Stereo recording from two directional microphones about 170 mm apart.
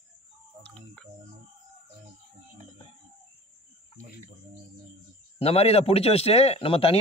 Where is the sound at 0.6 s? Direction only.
5° left (ahead or behind).